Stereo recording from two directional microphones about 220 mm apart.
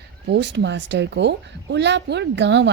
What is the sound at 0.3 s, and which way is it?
Speech, 50° right (ahead or behind).